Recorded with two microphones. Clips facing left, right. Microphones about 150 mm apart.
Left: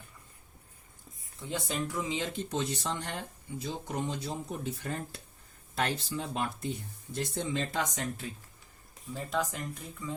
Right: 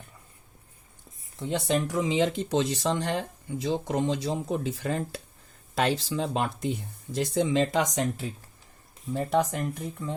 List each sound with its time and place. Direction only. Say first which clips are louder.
1.4 s speech: right 8 dB; 75° right (ahead or behind)
9.1 s speech: right 8 dB; 60° right (ahead or behind)